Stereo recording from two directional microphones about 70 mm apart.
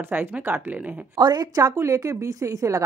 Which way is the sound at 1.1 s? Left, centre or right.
Right.